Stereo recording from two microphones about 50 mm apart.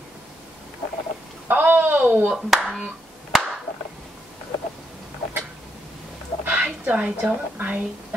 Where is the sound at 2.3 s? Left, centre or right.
Centre.